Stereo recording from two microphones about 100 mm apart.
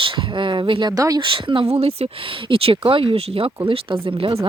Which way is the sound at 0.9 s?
35° right (ahead or behind).